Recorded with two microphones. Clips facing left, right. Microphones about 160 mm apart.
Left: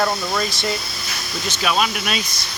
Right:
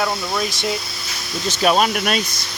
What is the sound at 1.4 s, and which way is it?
Speech, 40° right (ahead or behind).